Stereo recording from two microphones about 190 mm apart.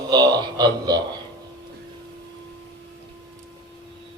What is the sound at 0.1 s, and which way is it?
Speech, 20° right (ahead or behind).